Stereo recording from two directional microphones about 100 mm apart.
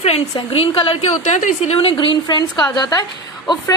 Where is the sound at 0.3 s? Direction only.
70° left (ahead or behind).